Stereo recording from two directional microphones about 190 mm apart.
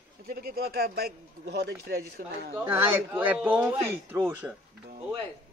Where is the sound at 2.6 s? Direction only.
10° right (ahead or behind).